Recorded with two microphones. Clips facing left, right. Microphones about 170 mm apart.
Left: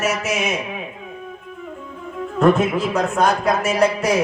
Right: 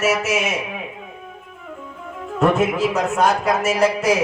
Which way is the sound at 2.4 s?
5° right (ahead or behind).